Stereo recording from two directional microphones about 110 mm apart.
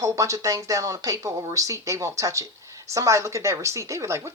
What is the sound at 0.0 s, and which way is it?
Speech, 30° right (ahead or behind).